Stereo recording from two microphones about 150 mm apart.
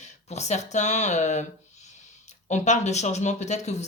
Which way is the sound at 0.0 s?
50° left (ahead or behind).